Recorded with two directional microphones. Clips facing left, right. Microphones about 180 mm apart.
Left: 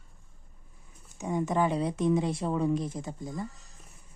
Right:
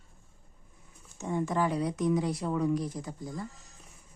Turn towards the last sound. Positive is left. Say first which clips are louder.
# left 2 dB
turn(degrees=20)  # may be behind; listen again after turning